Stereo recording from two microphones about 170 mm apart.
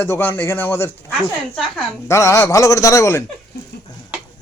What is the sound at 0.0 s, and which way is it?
Speech, 15° left (ahead or behind).